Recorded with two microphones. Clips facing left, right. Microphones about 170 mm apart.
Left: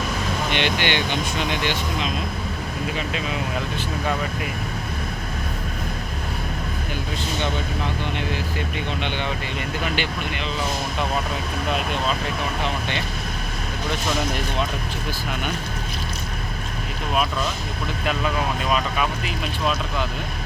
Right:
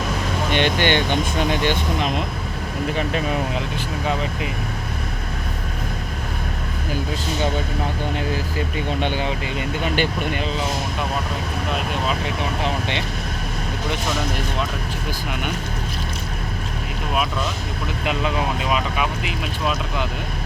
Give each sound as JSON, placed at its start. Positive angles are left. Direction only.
{"t": 0.5, "sound": "speech", "side_deg": -45}
{"t": 9.0, "sound": "speech", "side_deg": -45}
{"t": 18.0, "sound": "speech", "side_deg": -15}